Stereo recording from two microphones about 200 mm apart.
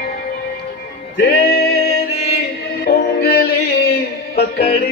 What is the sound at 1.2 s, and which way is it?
Music, 50° left (ahead or behind).